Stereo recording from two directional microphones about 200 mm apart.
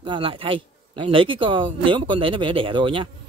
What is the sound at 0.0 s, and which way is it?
Speech, 25° right (ahead or behind).